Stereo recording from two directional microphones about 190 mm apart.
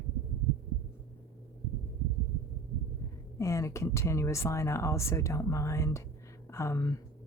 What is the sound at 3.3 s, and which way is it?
Speech, 15° left (ahead or behind).